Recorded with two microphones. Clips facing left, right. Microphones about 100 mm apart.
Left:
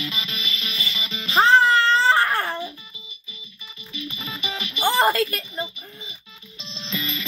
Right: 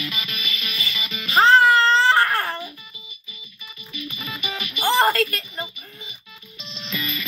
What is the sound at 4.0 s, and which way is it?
Music, 30° left (ahead or behind).